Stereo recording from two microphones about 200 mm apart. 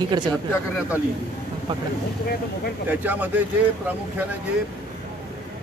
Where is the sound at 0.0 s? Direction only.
20° right (ahead or behind).